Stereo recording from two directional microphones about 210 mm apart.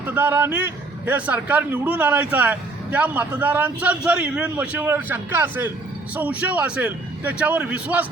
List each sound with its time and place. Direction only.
0.0 s a man's voice: 10° right (ahead or behind)